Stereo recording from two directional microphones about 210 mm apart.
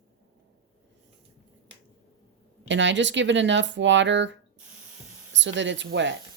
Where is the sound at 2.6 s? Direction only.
60° right (ahead or behind).